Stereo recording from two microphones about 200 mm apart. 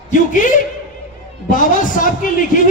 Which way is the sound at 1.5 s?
40° left (ahead or behind).